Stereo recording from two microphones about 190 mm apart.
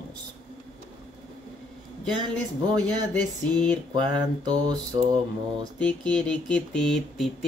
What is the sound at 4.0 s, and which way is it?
Mantra, 20° right (ahead or behind).